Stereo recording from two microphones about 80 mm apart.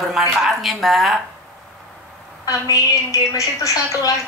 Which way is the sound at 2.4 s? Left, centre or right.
Left.